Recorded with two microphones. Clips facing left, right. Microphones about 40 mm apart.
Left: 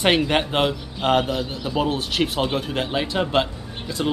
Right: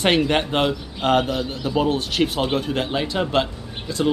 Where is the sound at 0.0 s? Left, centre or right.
Centre.